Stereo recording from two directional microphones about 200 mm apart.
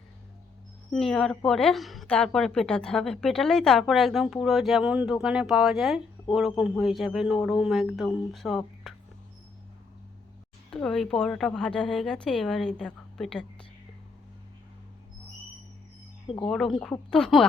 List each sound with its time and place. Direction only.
0.9 s a woman's voice: centre (ahead or behind)
10.7 s a woman's voice: 5° left (ahead or behind)
16.2 s speech: 25° left (ahead or behind)
16.5 s a woman's voice: centre (ahead or behind)